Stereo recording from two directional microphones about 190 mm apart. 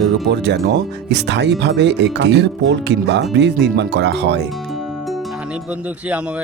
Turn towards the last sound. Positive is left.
turn(degrees=-65)  # may be behind; listen again after turning